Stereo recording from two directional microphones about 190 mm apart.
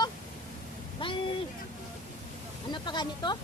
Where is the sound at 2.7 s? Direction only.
25° left (ahead or behind).